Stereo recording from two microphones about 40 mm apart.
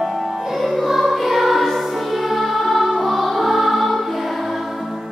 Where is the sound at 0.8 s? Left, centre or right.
Centre.